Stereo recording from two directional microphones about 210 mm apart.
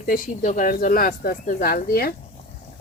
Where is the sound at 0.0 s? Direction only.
40° left (ahead or behind).